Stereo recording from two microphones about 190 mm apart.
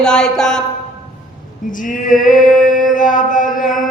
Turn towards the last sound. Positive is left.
turn(degrees=45)  # may be behind; listen again after turning